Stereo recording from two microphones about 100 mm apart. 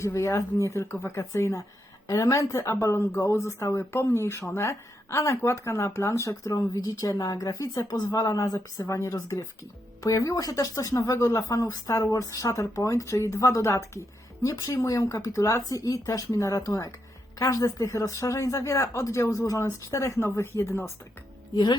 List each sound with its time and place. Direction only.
0.0 s speech: 30° left (ahead or behind)
21.5 s speech: 45° left (ahead or behind)